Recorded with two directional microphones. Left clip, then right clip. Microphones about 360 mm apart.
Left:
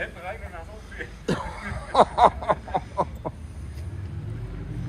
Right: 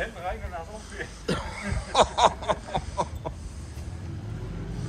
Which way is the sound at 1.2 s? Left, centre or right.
Left.